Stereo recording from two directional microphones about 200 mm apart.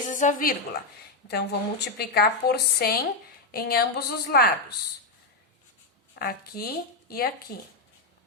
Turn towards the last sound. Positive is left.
turn(degrees=50)  # may be behind; listen again after turning